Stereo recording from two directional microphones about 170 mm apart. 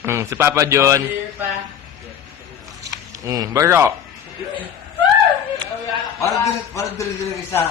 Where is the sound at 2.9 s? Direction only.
20° right (ahead or behind).